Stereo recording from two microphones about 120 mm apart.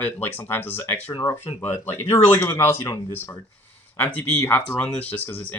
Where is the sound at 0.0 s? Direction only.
15° left (ahead or behind).